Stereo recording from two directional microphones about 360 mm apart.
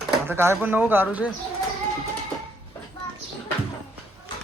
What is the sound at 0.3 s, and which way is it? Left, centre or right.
Speech, centre.